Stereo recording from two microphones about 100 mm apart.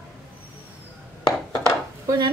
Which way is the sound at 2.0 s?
45° right (ahead or behind).